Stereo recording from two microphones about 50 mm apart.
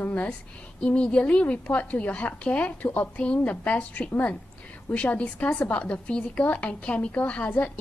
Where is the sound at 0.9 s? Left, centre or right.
Left.